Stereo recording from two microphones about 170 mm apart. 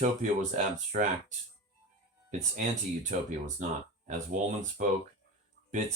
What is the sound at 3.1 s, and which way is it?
Speech, 50° right (ahead or behind).